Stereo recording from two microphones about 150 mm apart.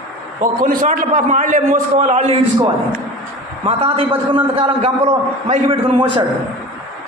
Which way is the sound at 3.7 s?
40° right (ahead or behind).